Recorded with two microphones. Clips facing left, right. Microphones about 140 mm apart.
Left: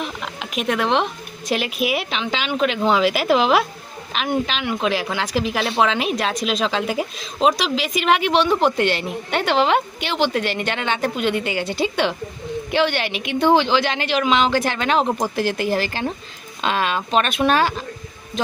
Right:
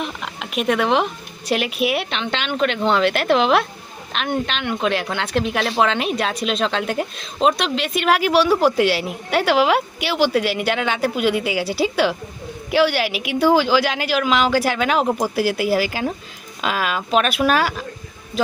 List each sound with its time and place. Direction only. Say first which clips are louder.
0.0 s a woman's voice: even; centre (ahead or behind)